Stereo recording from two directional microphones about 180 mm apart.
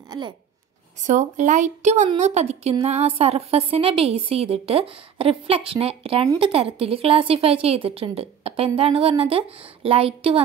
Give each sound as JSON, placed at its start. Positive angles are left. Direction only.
{"t": 1.0, "sound": "a woman's voice", "side_deg": -45}